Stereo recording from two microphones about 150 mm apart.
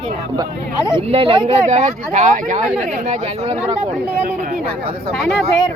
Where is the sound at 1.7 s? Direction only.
50° right (ahead or behind).